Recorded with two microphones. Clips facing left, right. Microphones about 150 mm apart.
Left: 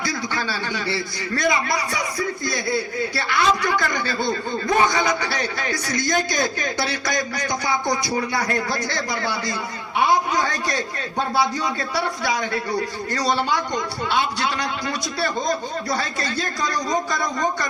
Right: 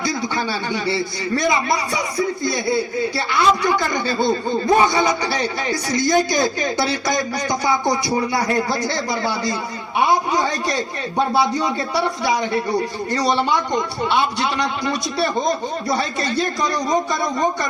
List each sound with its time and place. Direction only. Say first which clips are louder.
0.0 s a man's voice: right 4 dB; 25° right (ahead or behind)